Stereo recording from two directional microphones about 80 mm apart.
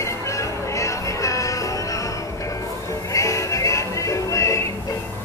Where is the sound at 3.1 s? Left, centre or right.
Left.